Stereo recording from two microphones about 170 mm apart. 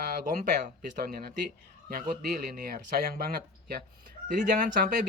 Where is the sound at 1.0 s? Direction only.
60° right (ahead or behind).